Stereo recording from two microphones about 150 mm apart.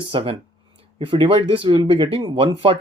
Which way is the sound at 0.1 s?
35° right (ahead or behind).